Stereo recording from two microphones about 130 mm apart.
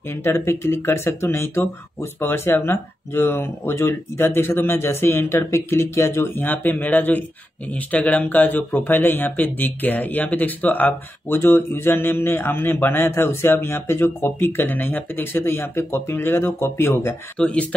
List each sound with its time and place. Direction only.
0.1 s speech: 20° left (ahead or behind)